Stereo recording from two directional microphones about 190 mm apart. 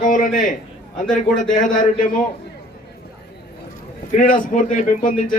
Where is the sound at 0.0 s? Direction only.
45° left (ahead or behind).